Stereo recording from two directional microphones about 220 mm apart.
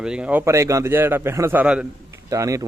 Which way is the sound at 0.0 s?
5° right (ahead or behind).